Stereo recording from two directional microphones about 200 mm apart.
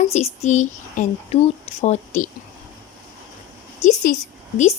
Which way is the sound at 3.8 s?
35° left (ahead or behind).